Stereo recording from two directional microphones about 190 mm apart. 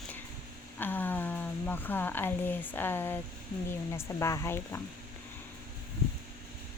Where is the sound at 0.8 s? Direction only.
10° left (ahead or behind).